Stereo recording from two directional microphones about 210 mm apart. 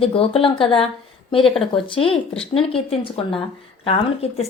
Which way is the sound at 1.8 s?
25° left (ahead or behind).